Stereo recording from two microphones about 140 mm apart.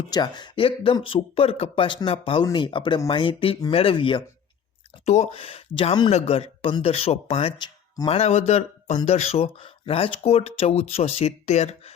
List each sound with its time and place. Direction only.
0.1 s speech: 30° left (ahead or behind)
5.0 s speech: 50° left (ahead or behind)